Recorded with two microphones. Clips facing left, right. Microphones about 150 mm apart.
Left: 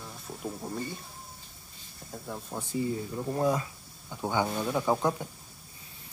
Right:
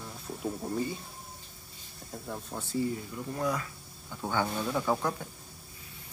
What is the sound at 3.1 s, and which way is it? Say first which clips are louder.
Speech: left 7 dB; 30° left (ahead or behind).